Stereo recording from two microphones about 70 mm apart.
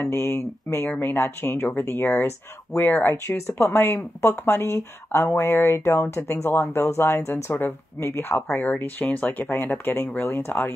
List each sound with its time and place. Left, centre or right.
0.1 s speech: left
2.7 s speech: left